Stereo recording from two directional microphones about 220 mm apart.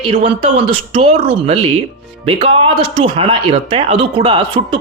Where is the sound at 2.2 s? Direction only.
25° right (ahead or behind).